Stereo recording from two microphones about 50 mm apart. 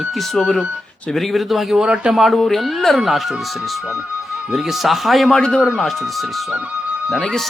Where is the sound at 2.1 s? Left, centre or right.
Centre.